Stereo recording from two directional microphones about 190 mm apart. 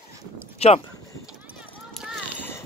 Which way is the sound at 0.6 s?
35° left (ahead or behind).